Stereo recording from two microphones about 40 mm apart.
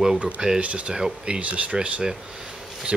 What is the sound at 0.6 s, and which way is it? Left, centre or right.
Speech, right.